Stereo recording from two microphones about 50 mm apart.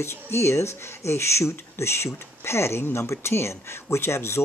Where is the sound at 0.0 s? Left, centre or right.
Left.